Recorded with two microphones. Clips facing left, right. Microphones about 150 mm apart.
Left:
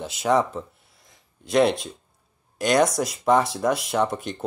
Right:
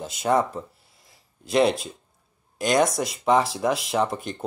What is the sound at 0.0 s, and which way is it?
Speech, centre (ahead or behind).